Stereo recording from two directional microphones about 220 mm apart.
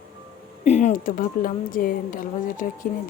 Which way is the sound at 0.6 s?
30° left (ahead or behind).